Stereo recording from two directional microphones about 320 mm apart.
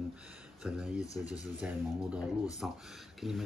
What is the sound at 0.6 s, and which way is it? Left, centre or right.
Speech, centre.